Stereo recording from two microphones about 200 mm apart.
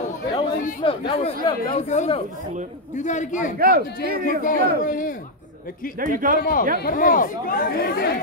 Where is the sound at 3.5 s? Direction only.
45° right (ahead or behind).